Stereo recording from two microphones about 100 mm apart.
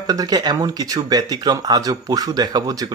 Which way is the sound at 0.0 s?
40° right (ahead or behind).